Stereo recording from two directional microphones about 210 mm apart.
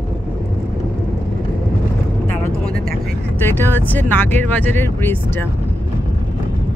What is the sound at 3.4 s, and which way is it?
Speech, 10° left (ahead or behind).